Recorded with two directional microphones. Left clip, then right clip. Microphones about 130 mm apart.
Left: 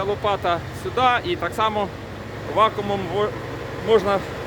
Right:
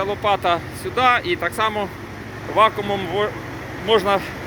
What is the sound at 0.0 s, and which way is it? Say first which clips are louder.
Speech: right 2 dB; centre (ahead or behind).